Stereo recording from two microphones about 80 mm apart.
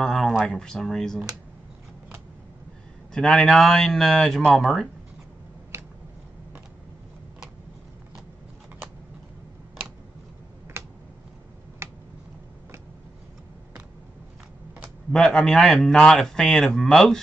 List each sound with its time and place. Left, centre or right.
0.0 s speech: centre
3.1 s a man's voice: centre
10.8 s a sound: right
15.1 s a man's voice: centre